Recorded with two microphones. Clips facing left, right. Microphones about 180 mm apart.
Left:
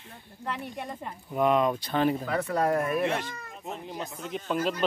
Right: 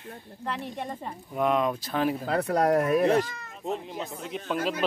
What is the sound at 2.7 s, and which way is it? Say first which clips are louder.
Speech: right 5 dB; 40° right (ahead or behind).